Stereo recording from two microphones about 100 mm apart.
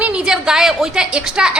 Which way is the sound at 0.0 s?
10° right (ahead or behind).